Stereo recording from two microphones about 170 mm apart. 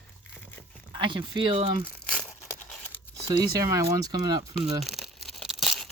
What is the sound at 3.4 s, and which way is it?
Speech, 20° right (ahead or behind).